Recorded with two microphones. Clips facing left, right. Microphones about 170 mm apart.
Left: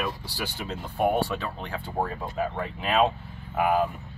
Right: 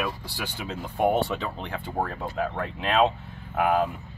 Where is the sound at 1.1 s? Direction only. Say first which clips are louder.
Right 1 dB; 20° right (ahead or behind).